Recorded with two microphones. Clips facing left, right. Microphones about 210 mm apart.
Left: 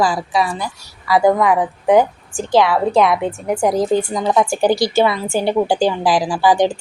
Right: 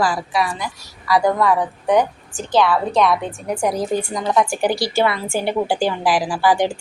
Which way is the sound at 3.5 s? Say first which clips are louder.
Left 4 dB; 20° left (ahead or behind).